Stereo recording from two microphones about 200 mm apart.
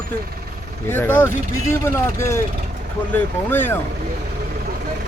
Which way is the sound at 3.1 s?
10° left (ahead or behind).